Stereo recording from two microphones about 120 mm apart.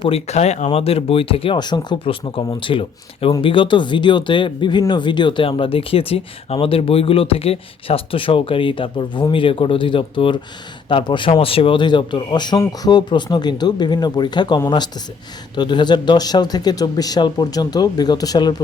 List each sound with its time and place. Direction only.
0.0 s speech: 60° left (ahead or behind); by 18.5 s 35° left (ahead or behind)